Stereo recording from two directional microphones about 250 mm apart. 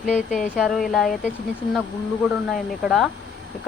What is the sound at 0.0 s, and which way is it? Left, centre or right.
Speech, centre.